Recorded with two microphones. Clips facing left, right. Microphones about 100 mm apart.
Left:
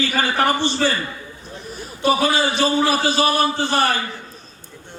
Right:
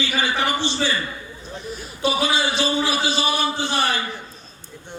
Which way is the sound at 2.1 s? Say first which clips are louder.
Left 4 dB; 50° left (ahead or behind).